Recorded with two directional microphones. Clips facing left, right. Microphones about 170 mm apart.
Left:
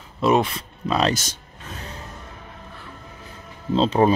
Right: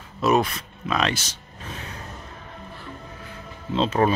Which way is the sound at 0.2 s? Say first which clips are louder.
Left 2 dB; 25° left (ahead or behind).